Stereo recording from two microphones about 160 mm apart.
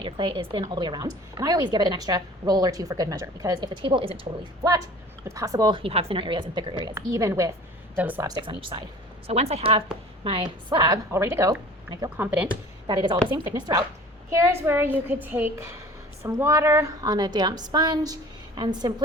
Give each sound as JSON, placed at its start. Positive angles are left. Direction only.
{"t": 0.0, "sound": "a woman's voice", "side_deg": -30}
{"t": 5.3, "sound": "a woman's voice", "side_deg": -20}
{"t": 8.3, "sound": "speech", "side_deg": -30}
{"t": 9.2, "sound": "a woman's voice", "side_deg": -40}
{"t": 12.1, "sound": "a child's voice", "side_deg": -10}
{"t": 12.9, "sound": "a woman's voice", "side_deg": -25}